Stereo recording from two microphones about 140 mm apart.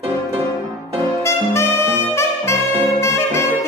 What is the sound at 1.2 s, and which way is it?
Saxophone, 20° left (ahead or behind).